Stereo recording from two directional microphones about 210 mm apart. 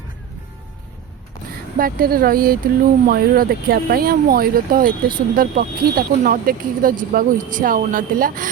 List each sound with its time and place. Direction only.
1.8 s speech: 45° right (ahead or behind)